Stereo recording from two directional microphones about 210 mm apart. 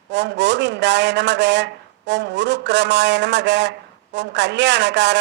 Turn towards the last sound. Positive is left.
turn(degrees=-55)  # may be behind; listen again after turning